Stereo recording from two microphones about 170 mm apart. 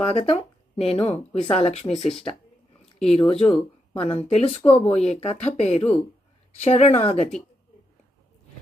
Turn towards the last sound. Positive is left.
turn(degrees=35)  # may be behind; listen again after turning